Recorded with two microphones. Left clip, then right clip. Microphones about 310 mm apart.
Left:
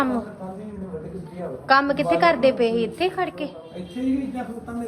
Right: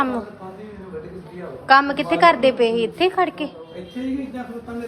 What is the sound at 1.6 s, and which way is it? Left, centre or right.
A woman's voice, centre.